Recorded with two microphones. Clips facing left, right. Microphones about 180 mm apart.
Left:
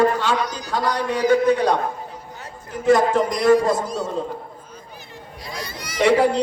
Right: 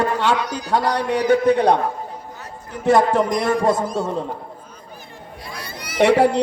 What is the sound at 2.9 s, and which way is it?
A man's voice, 55° right (ahead or behind).